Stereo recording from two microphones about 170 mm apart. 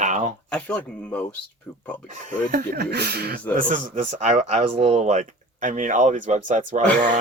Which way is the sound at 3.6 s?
55° right (ahead or behind).